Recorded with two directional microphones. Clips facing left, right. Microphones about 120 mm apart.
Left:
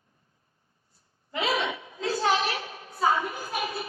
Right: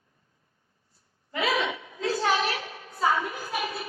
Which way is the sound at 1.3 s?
30° left (ahead or behind).